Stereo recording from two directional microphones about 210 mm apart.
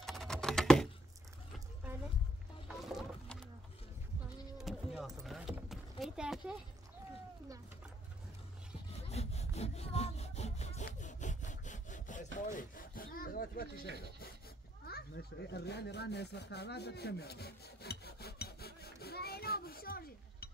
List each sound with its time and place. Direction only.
0.0 s typing: centre (ahead or behind)
2.7 s music: centre (ahead or behind)
4.6 s a sound: centre (ahead or behind)
5.2 s clip-clop: centre (ahead or behind)
9.1 s sawing: 30° left (ahead or behind)
12.4 s rub: 40° left (ahead or behind)
14.9 s a sound: 50° left (ahead or behind)